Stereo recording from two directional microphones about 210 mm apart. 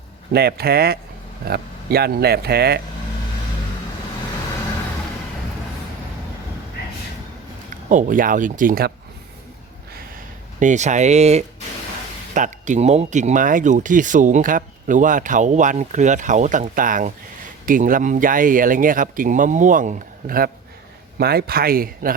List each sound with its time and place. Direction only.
0.3 s speech: 50° right (ahead or behind)
7.9 s speech: 40° right (ahead or behind)
10.6 s speech: 35° right (ahead or behind)